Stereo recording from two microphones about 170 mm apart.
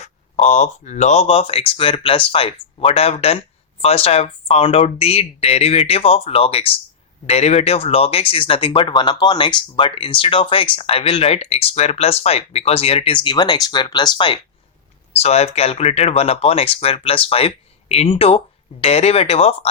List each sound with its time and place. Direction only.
0.0 s speech: 45° left (ahead or behind); by 14.3 s 25° left (ahead or behind)
15.2 s speech: 40° left (ahead or behind)